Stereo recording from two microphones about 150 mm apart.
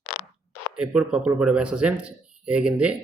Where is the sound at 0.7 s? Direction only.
5° right (ahead or behind).